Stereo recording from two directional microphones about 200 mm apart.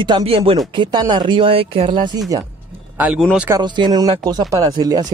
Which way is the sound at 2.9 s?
10° right (ahead or behind).